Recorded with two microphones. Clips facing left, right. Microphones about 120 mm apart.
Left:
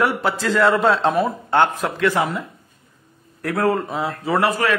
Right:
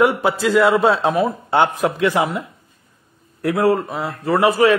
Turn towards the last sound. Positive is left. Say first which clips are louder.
# right 5 dB
turn(degrees=-15)  # may be behind; listen again after turning